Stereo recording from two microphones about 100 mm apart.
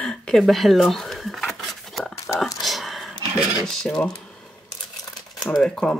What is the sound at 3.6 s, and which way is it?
Speech, 5° left (ahead or behind).